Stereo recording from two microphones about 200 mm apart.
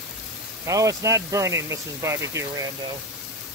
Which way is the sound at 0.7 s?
15° right (ahead or behind).